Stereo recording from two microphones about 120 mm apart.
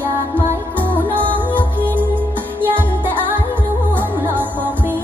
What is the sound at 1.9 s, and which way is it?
Music, 15° right (ahead or behind).